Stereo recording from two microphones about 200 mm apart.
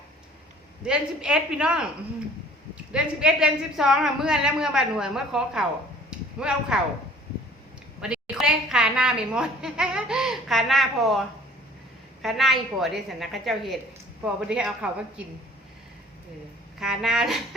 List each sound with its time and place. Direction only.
0.8 s a woman's voice: 5° right (ahead or behind)
2.9 s a woman's voice: 5° right (ahead or behind)
6.1 s a sound: 5° right (ahead or behind)
8.0 s a woman's voice: 5° right (ahead or behind)
12.2 s a woman's voice: centre (ahead or behind)
16.8 s a woman's voice: centre (ahead or behind)